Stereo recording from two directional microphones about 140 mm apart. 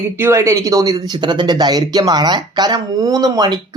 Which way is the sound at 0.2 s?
20° right (ahead or behind).